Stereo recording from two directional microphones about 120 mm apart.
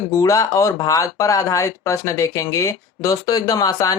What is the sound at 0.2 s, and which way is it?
Speech, 25° left (ahead or behind).